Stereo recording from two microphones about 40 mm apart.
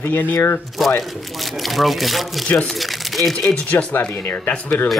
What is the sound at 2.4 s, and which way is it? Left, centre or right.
Speech, left.